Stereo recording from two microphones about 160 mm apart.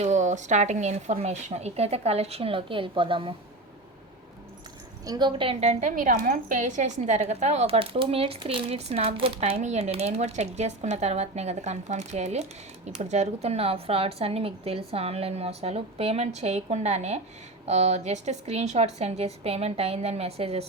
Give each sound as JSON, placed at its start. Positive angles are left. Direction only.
{"t": 0.0, "sound": "speech", "side_deg": -50}
{"t": 5.0, "sound": "speech", "side_deg": -25}
{"t": 6.0, "sound": "a woman's voice", "side_deg": -60}